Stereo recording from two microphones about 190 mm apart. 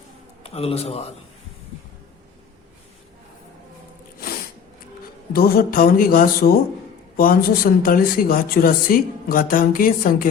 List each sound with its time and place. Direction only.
0.4 s a man's voice: 30° left (ahead or behind)
5.3 s speech: 50° left (ahead or behind)